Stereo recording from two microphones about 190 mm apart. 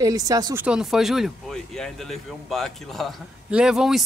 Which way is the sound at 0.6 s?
5° right (ahead or behind).